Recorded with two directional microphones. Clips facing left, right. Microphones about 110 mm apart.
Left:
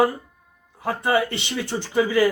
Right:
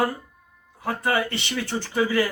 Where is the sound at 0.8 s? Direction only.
20° left (ahead or behind).